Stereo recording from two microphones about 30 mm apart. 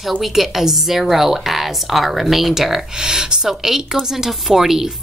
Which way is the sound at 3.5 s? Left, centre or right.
Centre.